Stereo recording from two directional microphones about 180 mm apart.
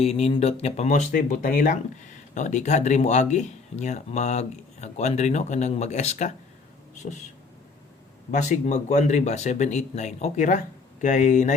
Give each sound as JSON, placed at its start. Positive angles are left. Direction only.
{"t": 0.0, "sound": "speech", "side_deg": 35}
{"t": 8.3, "sound": "speech", "side_deg": 40}